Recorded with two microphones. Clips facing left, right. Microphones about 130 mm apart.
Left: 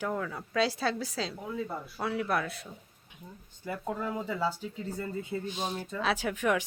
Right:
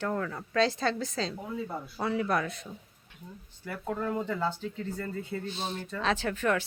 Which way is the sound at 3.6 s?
15° left (ahead or behind).